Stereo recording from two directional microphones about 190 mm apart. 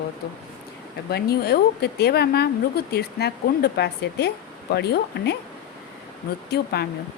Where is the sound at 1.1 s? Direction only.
55° left (ahead or behind).